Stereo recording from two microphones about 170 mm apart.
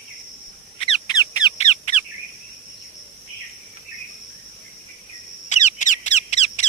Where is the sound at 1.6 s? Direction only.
40° left (ahead or behind).